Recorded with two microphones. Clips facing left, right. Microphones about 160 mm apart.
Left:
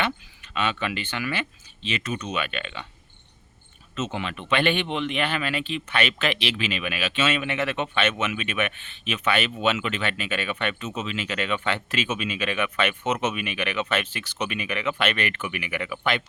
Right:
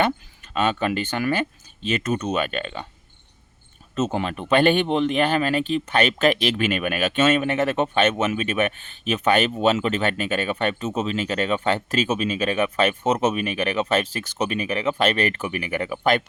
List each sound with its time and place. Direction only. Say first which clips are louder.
0.0 s speech: right 6 dB; 45° right (ahead or behind)
3.9 s speech: right 6 dB; 40° right (ahead or behind)